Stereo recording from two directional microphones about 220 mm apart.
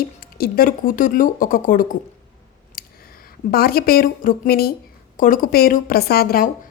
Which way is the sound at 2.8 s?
40° left (ahead or behind).